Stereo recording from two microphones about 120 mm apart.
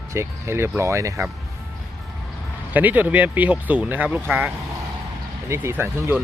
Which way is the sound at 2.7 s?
15° right (ahead or behind).